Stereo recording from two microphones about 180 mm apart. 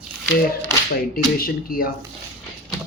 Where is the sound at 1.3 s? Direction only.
55° left (ahead or behind).